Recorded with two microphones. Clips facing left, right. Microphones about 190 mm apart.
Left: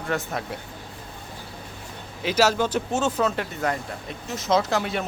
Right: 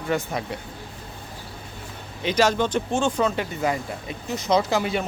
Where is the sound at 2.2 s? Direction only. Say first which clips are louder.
Even; 5° left (ahead or behind).